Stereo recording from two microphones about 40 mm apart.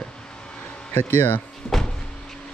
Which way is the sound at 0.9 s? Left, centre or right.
Left.